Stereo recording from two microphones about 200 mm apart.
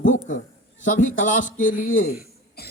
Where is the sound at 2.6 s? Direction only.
50° left (ahead or behind).